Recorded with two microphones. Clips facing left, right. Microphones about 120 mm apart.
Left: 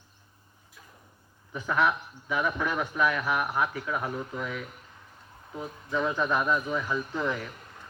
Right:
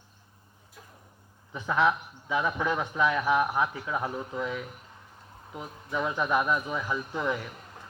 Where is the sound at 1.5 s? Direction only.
20° right (ahead or behind).